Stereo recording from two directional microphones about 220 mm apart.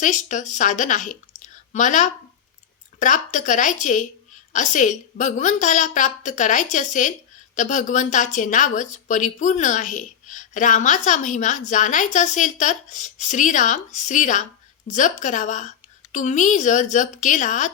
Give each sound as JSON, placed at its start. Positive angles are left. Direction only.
{"t": 0.0, "sound": "speech", "side_deg": 35}